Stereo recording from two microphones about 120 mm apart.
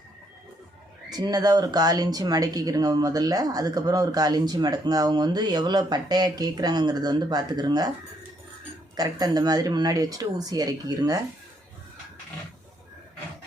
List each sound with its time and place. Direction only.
1.1 s speech: 35° right (ahead or behind)
9.0 s speech: 35° right (ahead or behind)